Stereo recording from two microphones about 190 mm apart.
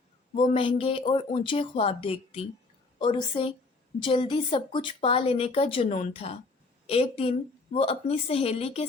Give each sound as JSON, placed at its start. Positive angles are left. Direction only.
{"t": 0.5, "sound": "a woman's voice", "side_deg": 30}